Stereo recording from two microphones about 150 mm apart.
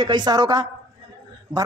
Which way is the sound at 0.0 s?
30° right (ahead or behind).